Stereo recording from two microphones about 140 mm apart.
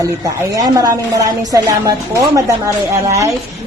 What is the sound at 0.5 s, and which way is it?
A woman's voice, 25° right (ahead or behind).